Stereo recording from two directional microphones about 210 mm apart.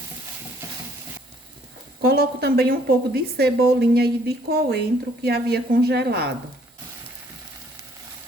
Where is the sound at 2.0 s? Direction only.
45° right (ahead or behind).